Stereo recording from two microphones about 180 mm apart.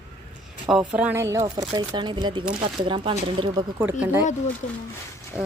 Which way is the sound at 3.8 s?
10° right (ahead or behind).